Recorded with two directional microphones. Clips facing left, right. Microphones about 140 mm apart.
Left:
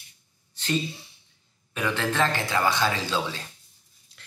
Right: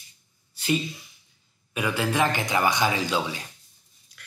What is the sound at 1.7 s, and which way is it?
Speech, 10° right (ahead or behind).